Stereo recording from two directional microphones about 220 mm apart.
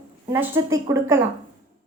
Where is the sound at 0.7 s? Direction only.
15° right (ahead or behind).